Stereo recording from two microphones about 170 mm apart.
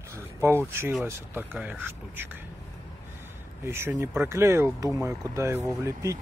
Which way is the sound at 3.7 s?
15° right (ahead or behind).